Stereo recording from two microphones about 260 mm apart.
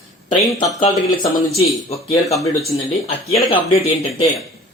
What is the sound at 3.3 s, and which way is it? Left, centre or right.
Speech, left.